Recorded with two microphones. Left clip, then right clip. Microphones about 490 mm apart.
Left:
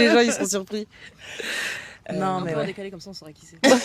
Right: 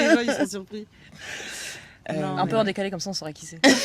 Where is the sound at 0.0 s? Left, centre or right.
Left.